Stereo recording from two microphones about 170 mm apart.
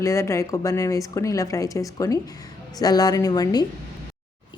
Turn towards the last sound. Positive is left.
turn(degrees=20)  # may be behind; listen again after turning